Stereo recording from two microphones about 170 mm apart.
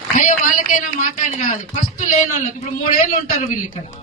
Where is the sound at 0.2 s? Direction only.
50° left (ahead or behind).